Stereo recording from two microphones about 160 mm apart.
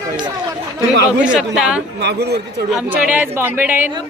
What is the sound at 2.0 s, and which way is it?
Speech, 90° right.